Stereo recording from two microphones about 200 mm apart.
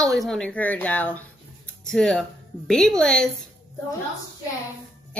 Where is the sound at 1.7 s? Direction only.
5° left (ahead or behind).